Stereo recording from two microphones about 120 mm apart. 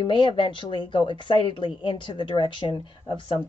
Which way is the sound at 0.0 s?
45° left (ahead or behind).